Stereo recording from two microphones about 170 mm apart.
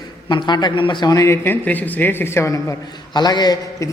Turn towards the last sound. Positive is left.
turn(degrees=20)  # may be behind; listen again after turning